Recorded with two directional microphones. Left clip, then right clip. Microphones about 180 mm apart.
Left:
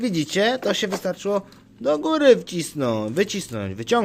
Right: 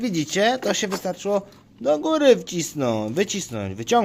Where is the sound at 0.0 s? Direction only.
Centre (ahead or behind).